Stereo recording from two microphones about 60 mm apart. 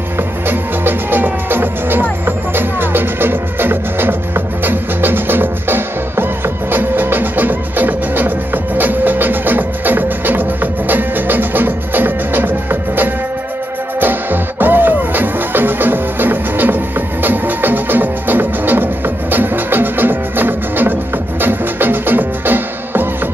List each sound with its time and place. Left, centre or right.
0.5 s music: right